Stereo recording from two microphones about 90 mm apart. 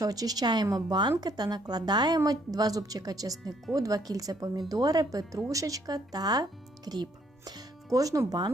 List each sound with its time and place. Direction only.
0.0 s a woman's voice: 45° right (ahead or behind)